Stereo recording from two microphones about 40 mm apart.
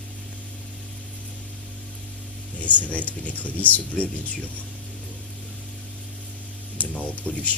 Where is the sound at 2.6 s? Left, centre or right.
Left.